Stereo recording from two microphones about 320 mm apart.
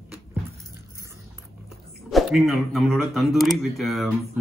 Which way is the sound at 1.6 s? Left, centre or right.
Centre.